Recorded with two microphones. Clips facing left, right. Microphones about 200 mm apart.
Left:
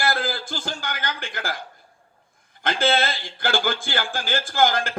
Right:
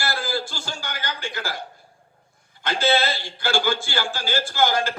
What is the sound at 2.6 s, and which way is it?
Speech, 50° left (ahead or behind).